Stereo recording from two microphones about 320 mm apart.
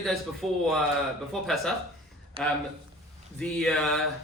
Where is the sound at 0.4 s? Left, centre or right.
Centre.